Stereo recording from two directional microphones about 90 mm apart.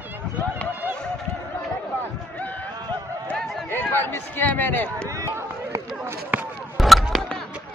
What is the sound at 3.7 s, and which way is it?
Speech, 25° left (ahead or behind).